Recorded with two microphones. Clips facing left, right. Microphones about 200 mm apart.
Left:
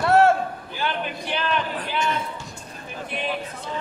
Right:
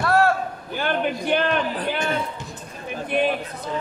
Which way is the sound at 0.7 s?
50° right (ahead or behind).